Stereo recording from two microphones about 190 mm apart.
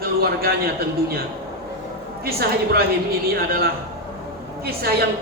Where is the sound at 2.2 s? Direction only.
55° right (ahead or behind).